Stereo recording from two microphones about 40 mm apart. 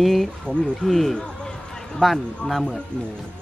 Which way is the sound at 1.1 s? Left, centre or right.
Centre.